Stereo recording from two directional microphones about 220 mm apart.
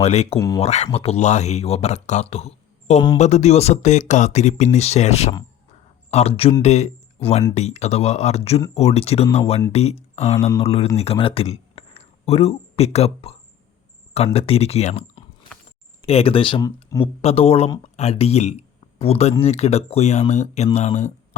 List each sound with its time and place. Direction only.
0.0 s speech: 30° left (ahead or behind)
0.3 s speech: 15° left (ahead or behind)
0.6 s speech: 30° left (ahead or behind)
14.3 s speech: 25° left (ahead or behind)
17.2 s speech: 25° left (ahead or behind)